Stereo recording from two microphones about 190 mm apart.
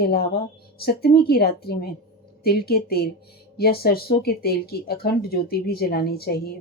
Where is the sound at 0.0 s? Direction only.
55° left (ahead or behind).